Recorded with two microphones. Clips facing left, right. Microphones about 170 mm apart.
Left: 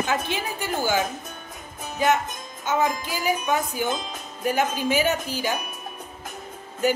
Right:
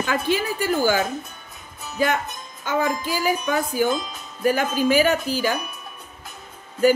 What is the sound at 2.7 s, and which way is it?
Speech, 55° right (ahead or behind).